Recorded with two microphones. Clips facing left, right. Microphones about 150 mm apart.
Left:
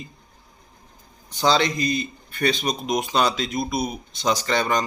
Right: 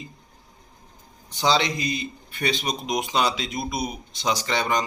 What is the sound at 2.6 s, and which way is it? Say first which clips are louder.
Speech: left 3 dB; 20° right (ahead or behind).